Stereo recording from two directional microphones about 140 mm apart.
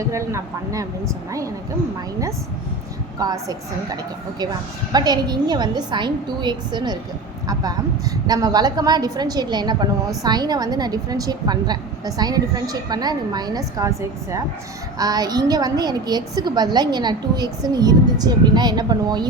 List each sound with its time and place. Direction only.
0.1 s a woman's voice: 20° right (ahead or behind)
3.2 s a woman's voice: 25° right (ahead or behind)
4.9 s a woman's voice: 30° right (ahead or behind)